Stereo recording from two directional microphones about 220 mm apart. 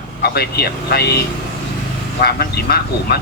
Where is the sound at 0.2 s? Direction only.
45° left (ahead or behind).